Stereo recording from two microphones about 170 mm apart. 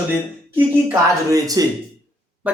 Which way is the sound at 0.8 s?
20° right (ahead or behind).